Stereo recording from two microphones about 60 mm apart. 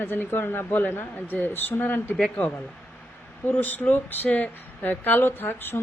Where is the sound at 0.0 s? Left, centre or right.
Left.